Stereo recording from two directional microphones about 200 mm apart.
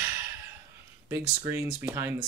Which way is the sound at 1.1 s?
15° right (ahead or behind).